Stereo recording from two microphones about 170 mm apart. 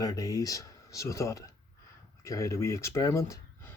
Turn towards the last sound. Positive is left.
turn(degrees=15)  # may be behind; listen again after turning